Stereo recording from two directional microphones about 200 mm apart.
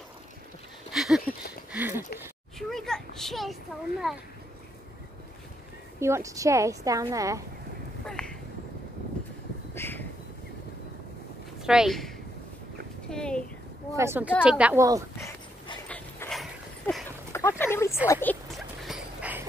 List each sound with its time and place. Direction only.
0.9 s a sound: centre (ahead or behind)
2.7 s a sound: centre (ahead or behind)
4.1 s speech: centre (ahead or behind)
5.9 s a woman's voice: 15° right (ahead or behind)
8.1 s a sound: 5° left (ahead or behind)
9.8 s crow: 10° left (ahead or behind)
11.6 s speech: 5° right (ahead or behind)
13.1 s speech: 5° left (ahead or behind)
13.9 s a woman's voice: 10° right (ahead or behind)
15.1 s dog: 15° left (ahead or behind)
16.3 s dog: centre (ahead or behind)
17.3 s a sound: 15° left (ahead or behind); by 19.4 s 5° right (ahead or behind)